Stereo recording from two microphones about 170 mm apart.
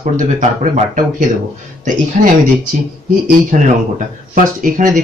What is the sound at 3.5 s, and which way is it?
A man's voice, 50° right (ahead or behind).